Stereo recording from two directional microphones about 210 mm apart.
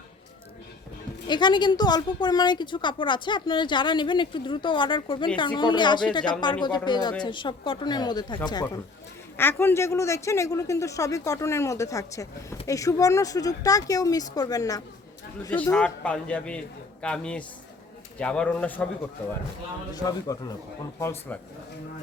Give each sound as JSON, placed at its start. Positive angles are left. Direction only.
{"t": 1.3, "sound": "a woman's voice", "side_deg": 20}
{"t": 9.4, "sound": "a man's voice", "side_deg": 10}
{"t": 19.9, "sound": "speech", "side_deg": 15}